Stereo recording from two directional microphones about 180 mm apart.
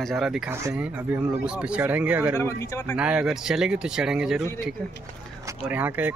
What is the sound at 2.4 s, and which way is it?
Speech, 15° left (ahead or behind).